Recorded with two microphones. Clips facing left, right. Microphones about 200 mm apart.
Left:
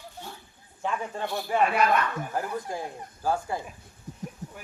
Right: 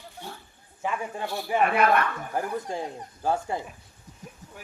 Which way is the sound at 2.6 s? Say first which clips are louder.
Right 2 dB; 25° right (ahead or behind).